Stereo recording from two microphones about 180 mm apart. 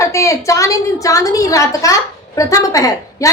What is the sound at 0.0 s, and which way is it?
A woman's voice, 15° left (ahead or behind).